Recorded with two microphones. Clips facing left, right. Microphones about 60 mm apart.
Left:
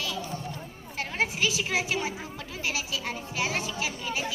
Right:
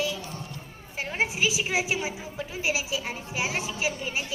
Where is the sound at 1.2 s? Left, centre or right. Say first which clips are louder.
Right 1 dB; centre.